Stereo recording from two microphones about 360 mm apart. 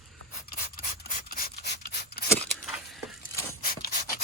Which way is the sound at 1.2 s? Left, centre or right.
Left.